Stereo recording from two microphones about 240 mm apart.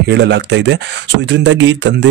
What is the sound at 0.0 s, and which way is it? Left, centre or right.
Speech, right.